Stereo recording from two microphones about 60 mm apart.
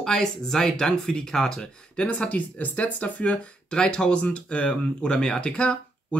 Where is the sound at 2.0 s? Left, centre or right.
Left.